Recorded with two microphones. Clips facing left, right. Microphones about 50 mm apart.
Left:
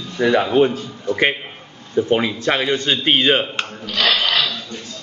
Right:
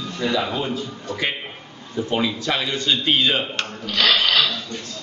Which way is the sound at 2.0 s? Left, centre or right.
Left.